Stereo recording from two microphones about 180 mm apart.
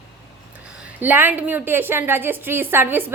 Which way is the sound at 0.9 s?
10° right (ahead or behind).